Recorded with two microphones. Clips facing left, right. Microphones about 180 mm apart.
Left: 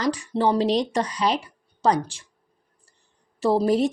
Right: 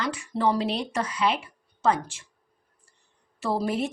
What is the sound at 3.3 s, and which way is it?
Speech, 35° left (ahead or behind).